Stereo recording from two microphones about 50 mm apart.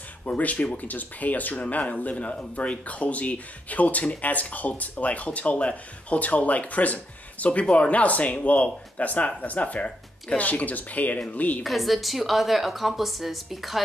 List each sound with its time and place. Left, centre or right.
0.4 s speech: left
11.6 s a woman's voice: centre